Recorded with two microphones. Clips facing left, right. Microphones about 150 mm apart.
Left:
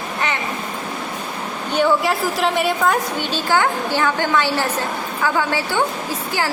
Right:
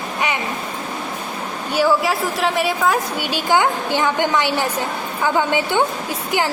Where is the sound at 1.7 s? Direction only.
5° right (ahead or behind).